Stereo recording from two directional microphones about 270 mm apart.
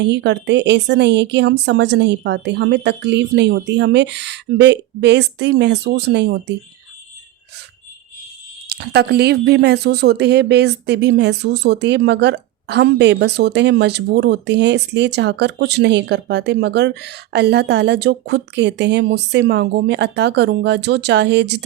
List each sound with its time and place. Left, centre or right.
0.0 s speech: right
8.7 s speech: right